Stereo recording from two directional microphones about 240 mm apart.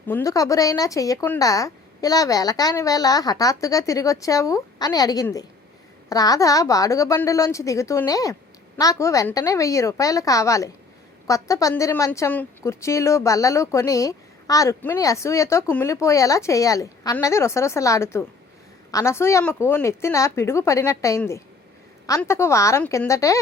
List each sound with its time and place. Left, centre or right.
0.1 s a woman's voice: centre